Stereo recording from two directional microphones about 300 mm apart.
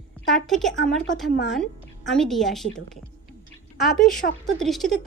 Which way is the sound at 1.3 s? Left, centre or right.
Left.